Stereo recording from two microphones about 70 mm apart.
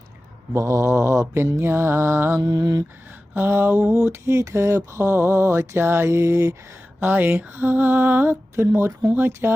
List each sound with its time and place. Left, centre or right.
0.5 s mantra: right
2.4 s mantra: right
3.3 s mantra: right
7.0 s a sound: right
8.5 s mantra: right